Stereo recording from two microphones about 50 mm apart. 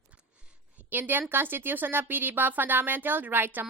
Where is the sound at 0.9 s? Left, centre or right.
Right.